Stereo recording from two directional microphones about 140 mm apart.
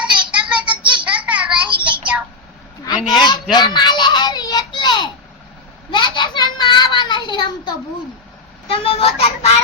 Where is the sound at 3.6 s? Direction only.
30° left (ahead or behind).